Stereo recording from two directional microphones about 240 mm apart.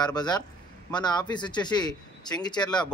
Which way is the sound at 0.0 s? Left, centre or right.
Centre.